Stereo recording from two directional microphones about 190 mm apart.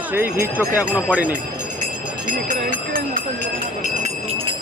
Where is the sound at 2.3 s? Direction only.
45° right (ahead or behind).